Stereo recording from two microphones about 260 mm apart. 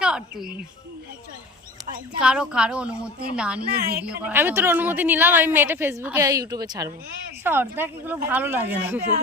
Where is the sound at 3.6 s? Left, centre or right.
Right.